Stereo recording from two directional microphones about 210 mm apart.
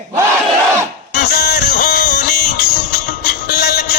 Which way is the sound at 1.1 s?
50° left (ahead or behind).